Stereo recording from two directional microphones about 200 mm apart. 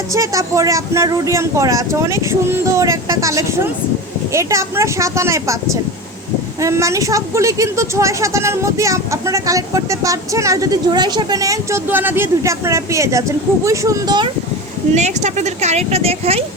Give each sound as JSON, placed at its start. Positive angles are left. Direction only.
{"t": 0.1, "sound": "speech", "side_deg": -15}
{"t": 14.9, "sound": "speech", "side_deg": -35}